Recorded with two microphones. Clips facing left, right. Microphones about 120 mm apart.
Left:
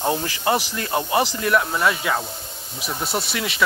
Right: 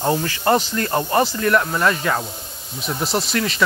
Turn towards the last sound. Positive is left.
turn(degrees=5)  # may be behind; listen again after turning